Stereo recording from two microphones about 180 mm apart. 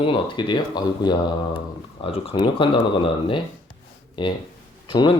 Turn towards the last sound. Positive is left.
turn(degrees=25)  # may be behind; listen again after turning